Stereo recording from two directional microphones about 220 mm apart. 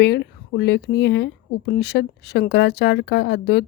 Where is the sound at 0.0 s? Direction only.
50° left (ahead or behind).